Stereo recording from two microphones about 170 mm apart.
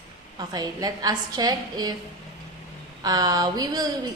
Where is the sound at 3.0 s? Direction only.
20° right (ahead or behind).